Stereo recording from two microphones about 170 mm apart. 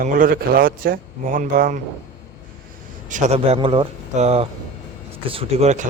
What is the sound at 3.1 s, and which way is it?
Speech, 40° right (ahead or behind).